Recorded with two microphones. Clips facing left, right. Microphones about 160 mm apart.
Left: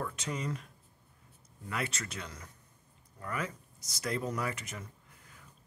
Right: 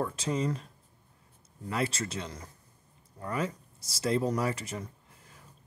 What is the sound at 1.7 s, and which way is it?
Speech, 30° right (ahead or behind).